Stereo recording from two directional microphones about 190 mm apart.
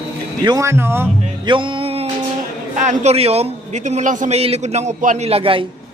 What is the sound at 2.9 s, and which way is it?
A man's voice, 35° right (ahead or behind).